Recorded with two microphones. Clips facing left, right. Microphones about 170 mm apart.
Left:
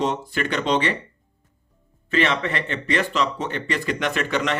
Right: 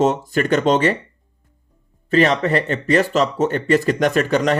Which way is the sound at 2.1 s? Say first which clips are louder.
Right 6 dB; 40° right (ahead or behind).